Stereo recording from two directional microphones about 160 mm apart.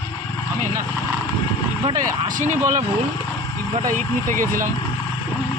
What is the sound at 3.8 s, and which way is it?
Speech, 55° right (ahead or behind).